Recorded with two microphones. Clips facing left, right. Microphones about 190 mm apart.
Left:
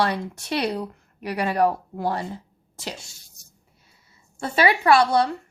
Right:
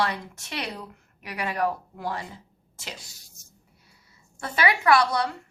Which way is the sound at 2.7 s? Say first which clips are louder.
Left 6 dB; 30° left (ahead or behind).